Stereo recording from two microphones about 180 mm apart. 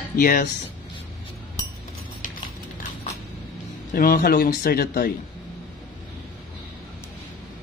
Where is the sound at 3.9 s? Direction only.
55° left (ahead or behind).